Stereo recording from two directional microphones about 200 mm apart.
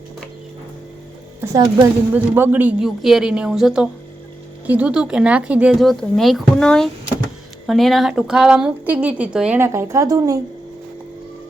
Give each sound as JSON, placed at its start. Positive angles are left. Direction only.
{"t": 1.4, "sound": "a woman's voice", "side_deg": -20}